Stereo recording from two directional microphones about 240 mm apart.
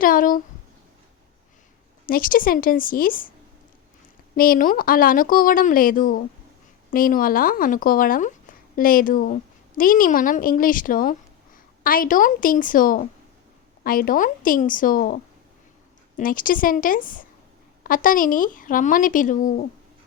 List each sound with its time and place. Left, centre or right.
0.0 s speech: left
2.0 s speech: left
4.4 s a woman's voice: left